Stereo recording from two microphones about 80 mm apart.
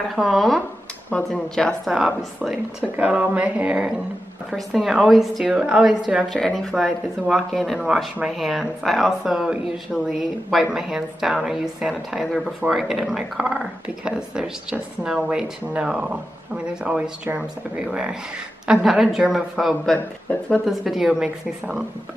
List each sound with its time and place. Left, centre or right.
0.1 s speech: centre
1.9 s speech: centre
4.5 s speech: centre
6.3 s speech: centre
20.2 s speech: centre
20.6 s speech: centre